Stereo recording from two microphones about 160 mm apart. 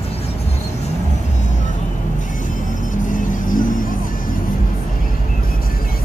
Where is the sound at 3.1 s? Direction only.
55° left (ahead or behind).